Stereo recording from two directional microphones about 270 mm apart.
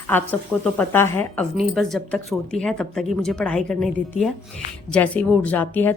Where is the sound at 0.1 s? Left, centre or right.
Centre.